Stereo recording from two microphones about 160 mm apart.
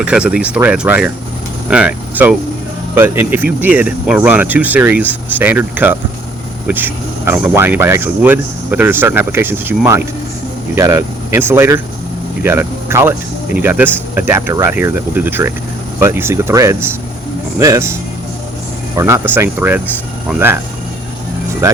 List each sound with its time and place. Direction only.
0.0 s speech: 5° right (ahead or behind)
18.9 s speech: 15° right (ahead or behind)